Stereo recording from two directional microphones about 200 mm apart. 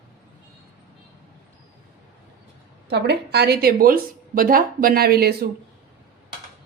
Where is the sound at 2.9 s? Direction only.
55° right (ahead or behind).